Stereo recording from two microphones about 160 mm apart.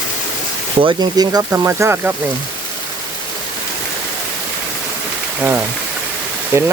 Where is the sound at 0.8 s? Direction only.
25° right (ahead or behind).